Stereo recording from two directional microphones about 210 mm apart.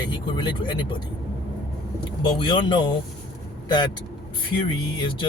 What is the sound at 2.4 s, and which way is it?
Speech, 20° left (ahead or behind).